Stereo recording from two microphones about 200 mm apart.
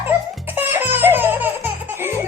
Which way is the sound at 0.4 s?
10° right (ahead or behind).